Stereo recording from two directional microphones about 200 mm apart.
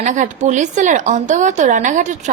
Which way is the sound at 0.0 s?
40° right (ahead or behind).